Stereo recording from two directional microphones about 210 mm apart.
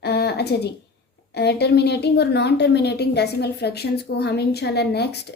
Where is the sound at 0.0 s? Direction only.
50° left (ahead or behind).